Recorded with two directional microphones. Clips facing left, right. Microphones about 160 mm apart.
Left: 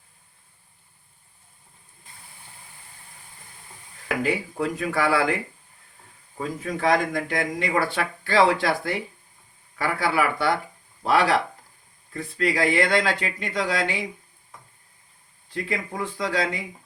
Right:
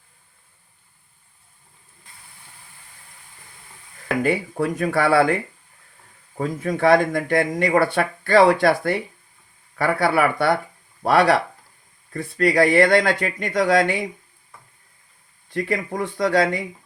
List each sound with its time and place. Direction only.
4.2 s a man's voice: 55° right (ahead or behind)
6.3 s a man's voice: 50° right (ahead or behind)
15.5 s a man's voice: 60° right (ahead or behind)